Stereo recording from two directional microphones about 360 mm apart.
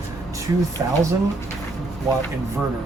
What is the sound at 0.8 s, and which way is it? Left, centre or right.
Speech, centre.